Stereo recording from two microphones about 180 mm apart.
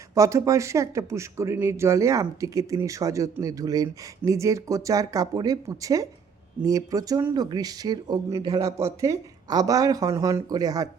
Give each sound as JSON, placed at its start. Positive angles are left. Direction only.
{"t": 0.1, "sound": "speech", "side_deg": -15}